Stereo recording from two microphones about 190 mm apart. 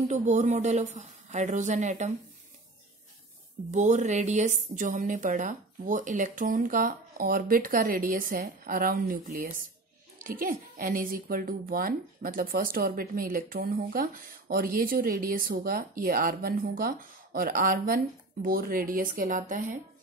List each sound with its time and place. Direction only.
0.1 s speech: 40° right (ahead or behind)
3.7 s speech: 40° right (ahead or behind)